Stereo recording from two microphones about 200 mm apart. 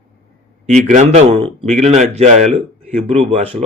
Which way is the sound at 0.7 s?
35° right (ahead or behind).